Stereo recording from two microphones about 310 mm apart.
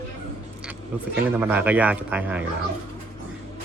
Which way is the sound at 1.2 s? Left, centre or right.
Centre.